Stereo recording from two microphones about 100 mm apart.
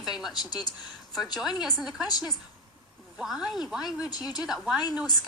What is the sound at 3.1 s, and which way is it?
Speech, 5° right (ahead or behind).